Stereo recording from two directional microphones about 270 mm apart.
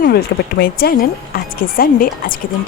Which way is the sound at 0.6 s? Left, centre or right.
Left.